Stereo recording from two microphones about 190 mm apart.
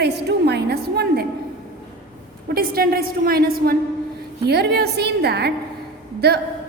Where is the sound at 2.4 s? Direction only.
50° right (ahead or behind).